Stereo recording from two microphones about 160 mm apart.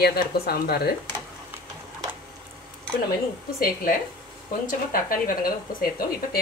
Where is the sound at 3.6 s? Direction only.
60° left (ahead or behind).